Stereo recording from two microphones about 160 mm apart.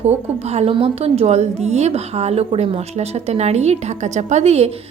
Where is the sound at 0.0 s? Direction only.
40° right (ahead or behind).